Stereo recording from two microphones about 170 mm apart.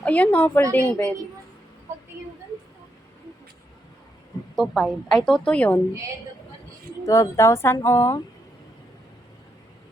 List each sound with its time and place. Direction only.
0.0 s a woman's voice: 10° left (ahead or behind)
4.5 s a woman's voice: centre (ahead or behind)
7.0 s speech: 20° left (ahead or behind)